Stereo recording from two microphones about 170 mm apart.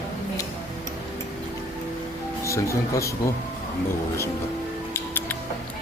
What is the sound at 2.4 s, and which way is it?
Speech, 15° left (ahead or behind).